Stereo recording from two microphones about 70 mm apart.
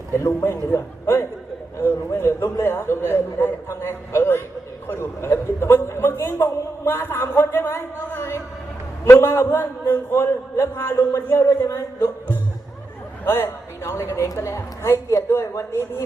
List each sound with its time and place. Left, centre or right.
0.1 s a man's voice: left
11.9 s music: left
13.2 s a man's voice: left